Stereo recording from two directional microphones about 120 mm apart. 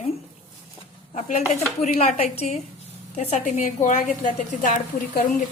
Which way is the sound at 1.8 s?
70° left (ahead or behind).